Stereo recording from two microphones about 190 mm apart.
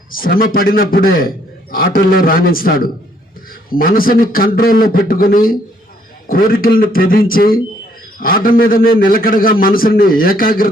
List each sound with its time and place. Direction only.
0.1 s a man's voice: 50° left (ahead or behind)